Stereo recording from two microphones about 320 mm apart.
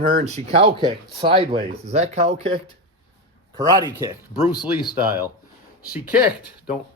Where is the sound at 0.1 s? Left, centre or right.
Right.